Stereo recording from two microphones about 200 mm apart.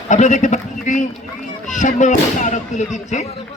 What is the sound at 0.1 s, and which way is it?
Speech, 35° left (ahead or behind).